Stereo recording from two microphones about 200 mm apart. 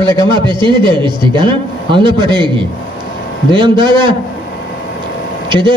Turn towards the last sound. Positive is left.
turn(degrees=-25)  # may be behind; listen again after turning